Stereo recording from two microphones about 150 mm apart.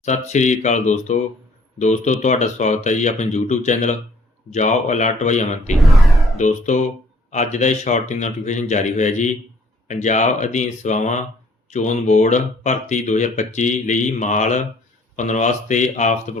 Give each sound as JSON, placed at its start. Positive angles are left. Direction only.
{"t": 0.0, "sound": "speech", "side_deg": 50}
{"t": 5.7, "sound": "speech", "side_deg": 0}
{"t": 6.3, "sound": "speech", "side_deg": 55}